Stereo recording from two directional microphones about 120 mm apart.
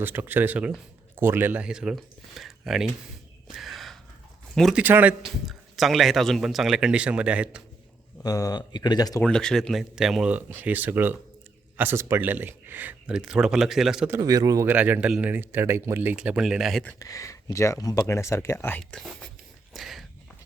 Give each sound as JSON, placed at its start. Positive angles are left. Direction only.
{"t": 0.0, "sound": "speech", "side_deg": -15}
{"t": 3.5, "sound": "gasp", "side_deg": 0}
{"t": 4.5, "sound": "speech", "side_deg": 0}
{"t": 4.8, "sound": "speech", "side_deg": -15}
{"t": 5.5, "sound": "speech", "side_deg": 0}
{"t": 8.2, "sound": "speech", "side_deg": 30}
{"t": 9.2, "sound": "speech", "side_deg": 5}
{"t": 14.2, "sound": "speech", "side_deg": -30}
{"t": 14.7, "sound": "speech", "side_deg": -15}
{"t": 16.1, "sound": "speech", "side_deg": -10}
{"t": 17.0, "sound": "speech", "side_deg": 30}
{"t": 19.7, "sound": "a sound", "side_deg": 0}